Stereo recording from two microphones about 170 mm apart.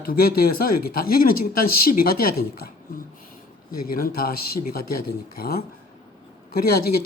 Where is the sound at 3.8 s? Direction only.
60° left (ahead or behind).